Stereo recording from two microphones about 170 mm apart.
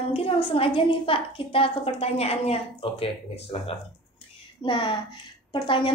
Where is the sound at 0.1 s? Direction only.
35° left (ahead or behind).